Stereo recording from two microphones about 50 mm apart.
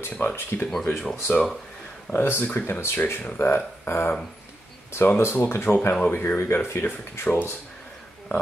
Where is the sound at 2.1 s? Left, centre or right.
Left.